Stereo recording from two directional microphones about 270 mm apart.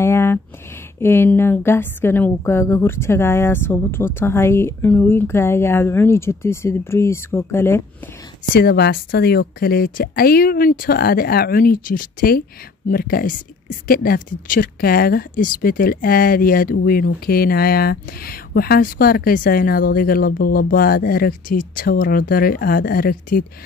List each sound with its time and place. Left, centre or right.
0.0 s a sound: centre
0.9 s a woman's voice: centre
8.5 s speech: left